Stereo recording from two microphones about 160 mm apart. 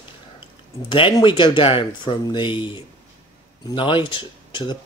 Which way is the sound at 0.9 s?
30° left (ahead or behind).